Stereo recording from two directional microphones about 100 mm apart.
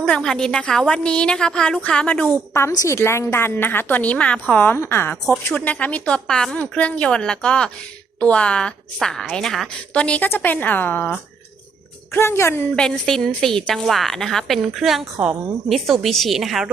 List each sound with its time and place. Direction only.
0.0 s a woman's voice: 5° left (ahead or behind)
2.5 s a woman's voice: 25° left (ahead or behind)
12.7 s a woman's voice: 5° left (ahead or behind)